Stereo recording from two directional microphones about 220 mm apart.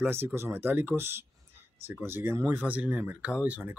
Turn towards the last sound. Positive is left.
turn(degrees=-5)  # may be behind; listen again after turning